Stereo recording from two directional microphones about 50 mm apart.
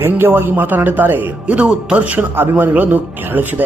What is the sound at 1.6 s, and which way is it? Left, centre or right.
Speech, right.